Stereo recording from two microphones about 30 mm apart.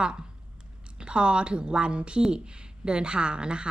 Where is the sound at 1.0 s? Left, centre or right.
Right.